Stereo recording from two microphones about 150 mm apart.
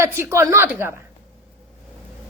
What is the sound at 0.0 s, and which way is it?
A man's voice, 15° right (ahead or behind).